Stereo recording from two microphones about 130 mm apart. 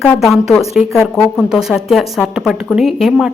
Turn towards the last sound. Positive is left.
turn(degrees=-5)  # may be behind; listen again after turning